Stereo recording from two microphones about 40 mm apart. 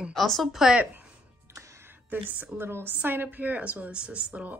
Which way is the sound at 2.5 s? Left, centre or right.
Right.